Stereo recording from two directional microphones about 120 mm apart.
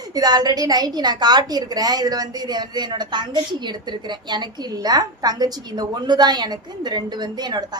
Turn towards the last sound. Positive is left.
turn(degrees=-35)  # may be behind; listen again after turning